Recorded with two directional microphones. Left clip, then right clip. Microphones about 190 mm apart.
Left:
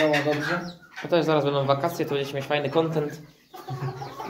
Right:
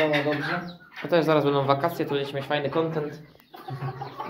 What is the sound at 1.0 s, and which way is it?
Speech, 10° right (ahead or behind).